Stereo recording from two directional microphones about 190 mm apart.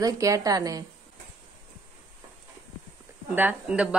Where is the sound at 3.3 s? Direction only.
10° right (ahead or behind).